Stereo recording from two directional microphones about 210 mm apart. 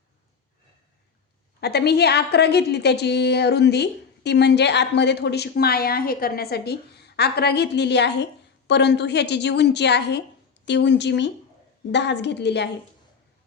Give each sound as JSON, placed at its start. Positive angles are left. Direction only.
{"t": 1.6, "sound": "a woman's voice", "side_deg": 50}